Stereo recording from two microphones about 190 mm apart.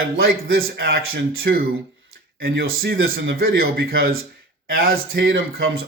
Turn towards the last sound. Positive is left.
turn(degrees=-55)  # may be behind; listen again after turning